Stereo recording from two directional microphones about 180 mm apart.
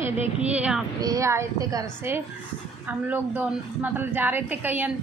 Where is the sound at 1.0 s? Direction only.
15° right (ahead or behind).